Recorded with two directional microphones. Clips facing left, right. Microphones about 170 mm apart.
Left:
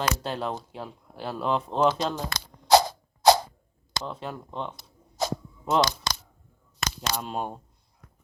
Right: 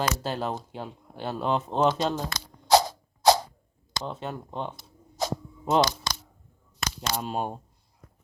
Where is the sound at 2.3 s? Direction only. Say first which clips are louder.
Left 3 dB; 65° left (ahead or behind).